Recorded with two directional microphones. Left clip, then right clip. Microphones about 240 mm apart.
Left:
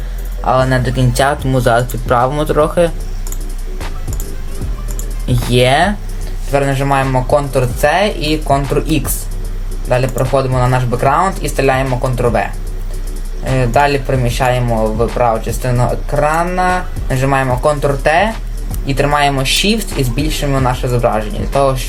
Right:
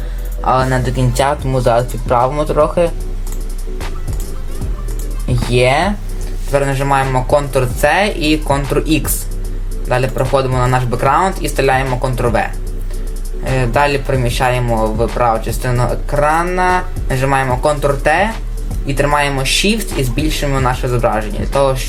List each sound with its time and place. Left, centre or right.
0.4 s speech: centre
5.3 s speech: centre
6.5 s speech: centre
13.6 s speech: centre